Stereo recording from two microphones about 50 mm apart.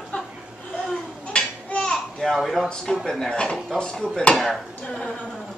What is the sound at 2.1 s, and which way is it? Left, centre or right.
Speech, centre.